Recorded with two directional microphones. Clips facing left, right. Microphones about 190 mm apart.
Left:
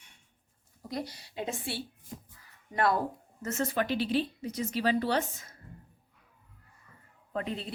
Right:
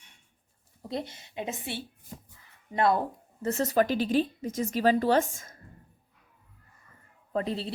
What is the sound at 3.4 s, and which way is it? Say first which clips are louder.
A woman's voice: right 5 dB; 35° right (ahead or behind).